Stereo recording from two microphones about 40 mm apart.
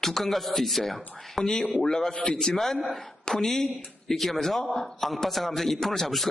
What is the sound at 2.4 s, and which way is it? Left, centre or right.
A man's voice, centre.